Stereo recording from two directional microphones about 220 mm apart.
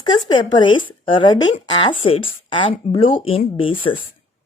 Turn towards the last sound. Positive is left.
turn(degrees=25)  # may be behind; listen again after turning